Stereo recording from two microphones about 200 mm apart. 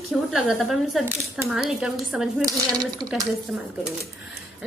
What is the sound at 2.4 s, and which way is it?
Speech, 20° right (ahead or behind).